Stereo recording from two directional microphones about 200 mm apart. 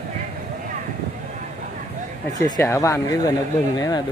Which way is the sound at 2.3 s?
20° left (ahead or behind).